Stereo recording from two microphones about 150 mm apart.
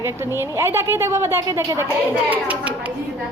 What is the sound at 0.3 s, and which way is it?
A woman's voice, 15° right (ahead or behind).